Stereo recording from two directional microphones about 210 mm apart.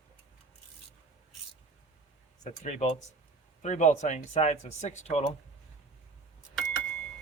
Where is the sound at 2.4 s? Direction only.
35° left (ahead or behind).